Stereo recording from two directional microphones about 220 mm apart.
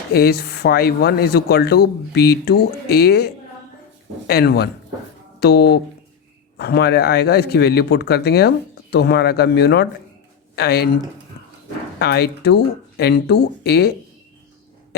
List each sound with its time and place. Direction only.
0.1 s speech: 45° left (ahead or behind)
4.3 s speech: 45° left (ahead or behind)
11.9 s speech: 45° left (ahead or behind)